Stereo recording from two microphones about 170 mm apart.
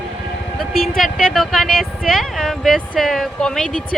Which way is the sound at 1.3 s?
Centre (ahead or behind).